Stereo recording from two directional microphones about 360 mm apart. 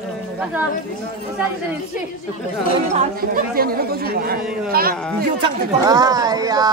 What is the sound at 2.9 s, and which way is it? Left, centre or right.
Speech, right.